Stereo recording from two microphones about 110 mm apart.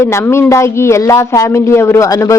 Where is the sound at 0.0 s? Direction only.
25° left (ahead or behind).